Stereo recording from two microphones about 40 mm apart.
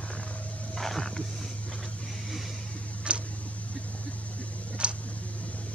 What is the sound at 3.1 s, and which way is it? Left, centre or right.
Tick, right.